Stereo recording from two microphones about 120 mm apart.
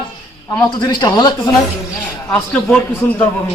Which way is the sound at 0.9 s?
35° left (ahead or behind).